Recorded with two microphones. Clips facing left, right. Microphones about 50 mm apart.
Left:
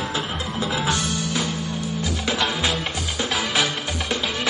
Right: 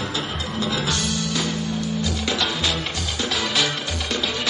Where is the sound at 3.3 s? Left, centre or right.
Centre.